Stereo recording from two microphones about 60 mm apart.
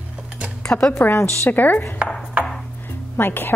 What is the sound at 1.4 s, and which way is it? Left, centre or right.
Speech, left.